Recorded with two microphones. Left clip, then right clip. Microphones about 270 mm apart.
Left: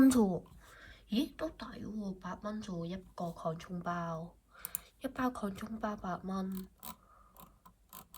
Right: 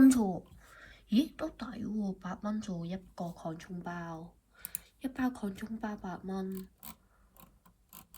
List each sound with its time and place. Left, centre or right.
0.0 s speech: centre